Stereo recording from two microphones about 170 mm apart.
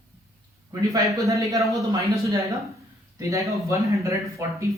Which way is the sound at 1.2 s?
20° right (ahead or behind).